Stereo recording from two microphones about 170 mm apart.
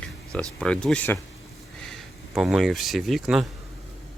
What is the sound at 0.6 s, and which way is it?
Speech, 5° left (ahead or behind).